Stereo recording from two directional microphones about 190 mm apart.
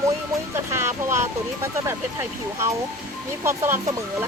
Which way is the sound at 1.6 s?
15° right (ahead or behind).